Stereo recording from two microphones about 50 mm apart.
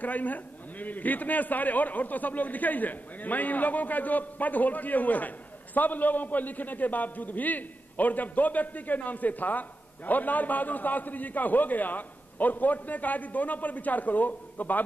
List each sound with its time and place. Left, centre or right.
0.0 s a man's voice: left